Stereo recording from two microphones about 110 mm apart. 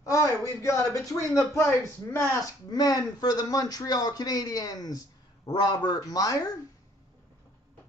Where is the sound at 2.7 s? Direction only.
35° left (ahead or behind).